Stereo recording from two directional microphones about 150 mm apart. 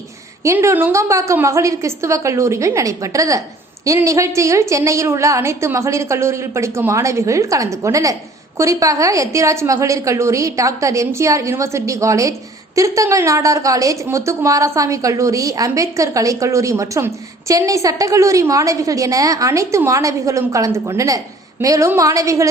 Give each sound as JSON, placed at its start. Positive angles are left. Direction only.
{"t": 0.4, "sound": "a woman's voice", "side_deg": -15}